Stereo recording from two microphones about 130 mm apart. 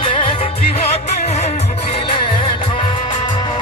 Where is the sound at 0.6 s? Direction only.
75° left (ahead or behind); by 2.0 s 55° left (ahead or behind).